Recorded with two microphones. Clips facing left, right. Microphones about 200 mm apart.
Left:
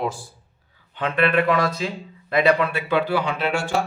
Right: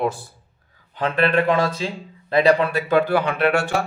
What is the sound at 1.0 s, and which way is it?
Speech, 35° right (ahead or behind).